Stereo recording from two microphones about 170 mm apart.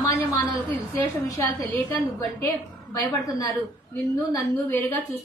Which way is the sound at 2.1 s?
20° left (ahead or behind).